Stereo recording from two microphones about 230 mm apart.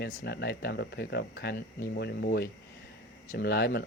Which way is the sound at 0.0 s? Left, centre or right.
Left.